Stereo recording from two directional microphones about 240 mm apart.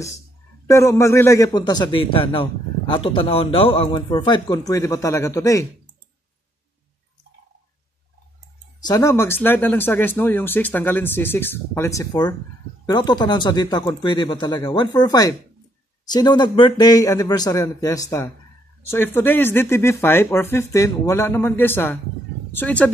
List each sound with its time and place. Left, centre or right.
0.7 s a man's voice: centre
8.8 s speech: centre